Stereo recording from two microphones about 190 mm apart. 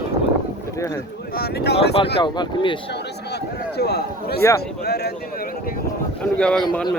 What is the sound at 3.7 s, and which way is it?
A man's voice, 60° left (ahead or behind).